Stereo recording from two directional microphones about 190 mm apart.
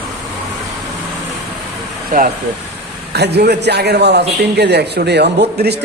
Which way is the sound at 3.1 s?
60° right (ahead or behind).